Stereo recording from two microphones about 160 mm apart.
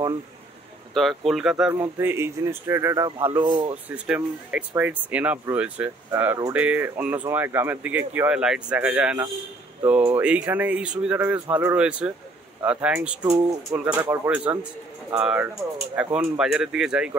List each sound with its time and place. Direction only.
0.9 s speech: centre (ahead or behind)
1.7 s speech: 15° right (ahead or behind)
3.4 s speech: 30° right (ahead or behind)
3.9 s speech: 10° right (ahead or behind)